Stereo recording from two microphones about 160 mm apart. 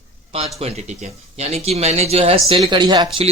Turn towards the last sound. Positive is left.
turn(degrees=-25)  # may be behind; listen again after turning